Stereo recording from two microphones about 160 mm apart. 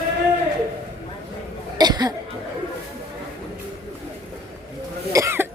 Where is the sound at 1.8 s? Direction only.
25° right (ahead or behind).